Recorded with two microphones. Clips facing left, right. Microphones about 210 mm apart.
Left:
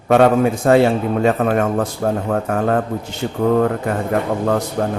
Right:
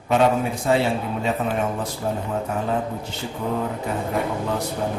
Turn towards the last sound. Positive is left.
turn(degrees=55)  # may be behind; listen again after turning